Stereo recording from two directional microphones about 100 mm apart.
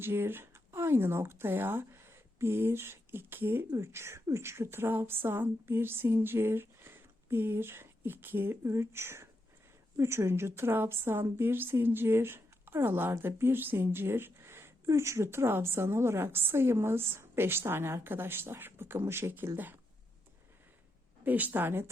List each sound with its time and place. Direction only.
0.0 s a woman's voice: 20° right (ahead or behind)
21.2 s a woman's voice: 15° right (ahead or behind)